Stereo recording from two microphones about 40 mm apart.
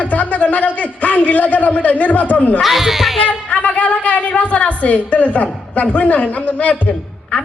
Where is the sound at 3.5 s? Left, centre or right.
Left.